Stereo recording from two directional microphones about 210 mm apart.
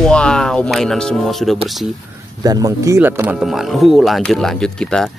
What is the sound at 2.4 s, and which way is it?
Speech, 15° right (ahead or behind).